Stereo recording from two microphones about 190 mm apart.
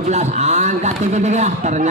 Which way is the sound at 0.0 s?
35° right (ahead or behind).